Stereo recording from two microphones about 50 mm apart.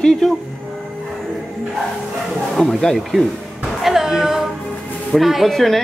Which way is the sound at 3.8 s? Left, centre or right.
Centre.